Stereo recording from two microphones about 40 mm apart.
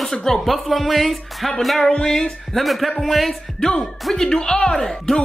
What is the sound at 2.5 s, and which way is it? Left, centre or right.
Speech, centre.